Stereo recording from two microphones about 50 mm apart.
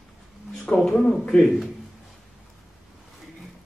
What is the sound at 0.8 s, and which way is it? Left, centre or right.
Speech, centre.